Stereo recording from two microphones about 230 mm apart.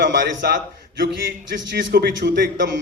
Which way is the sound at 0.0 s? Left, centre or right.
Right.